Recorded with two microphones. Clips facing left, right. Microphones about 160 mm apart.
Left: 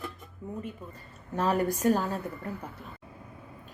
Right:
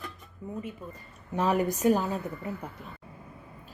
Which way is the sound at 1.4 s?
10° right (ahead or behind).